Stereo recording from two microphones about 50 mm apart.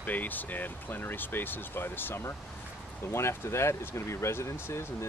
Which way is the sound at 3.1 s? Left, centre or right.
Left.